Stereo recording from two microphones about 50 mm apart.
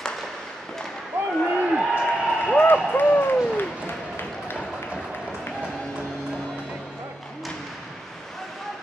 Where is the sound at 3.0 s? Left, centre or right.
Left.